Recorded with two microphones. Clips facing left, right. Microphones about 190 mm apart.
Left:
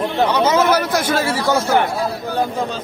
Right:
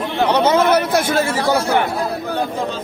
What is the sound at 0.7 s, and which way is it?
Speech, 30° right (ahead or behind).